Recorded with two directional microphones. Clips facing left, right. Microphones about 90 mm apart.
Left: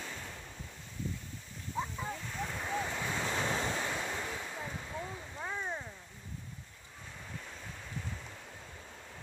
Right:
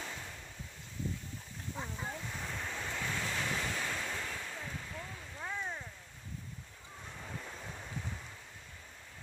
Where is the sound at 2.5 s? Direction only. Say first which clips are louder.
Left 5 dB; 15° left (ahead or behind).